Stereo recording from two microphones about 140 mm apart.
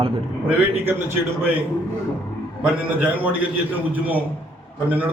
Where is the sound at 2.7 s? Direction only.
10° right (ahead or behind).